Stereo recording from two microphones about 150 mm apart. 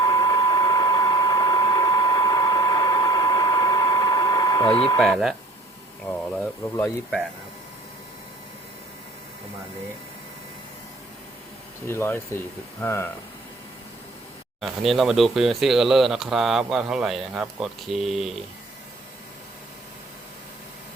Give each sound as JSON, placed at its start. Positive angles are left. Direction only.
{"t": 0.0, "sound": "a sound", "side_deg": 25}
{"t": 4.7, "sound": "speech", "side_deg": 35}
{"t": 4.9, "sound": "speech", "side_deg": 0}
{"t": 11.9, "sound": "speech", "side_deg": 15}
{"t": 14.6, "sound": "speech", "side_deg": 0}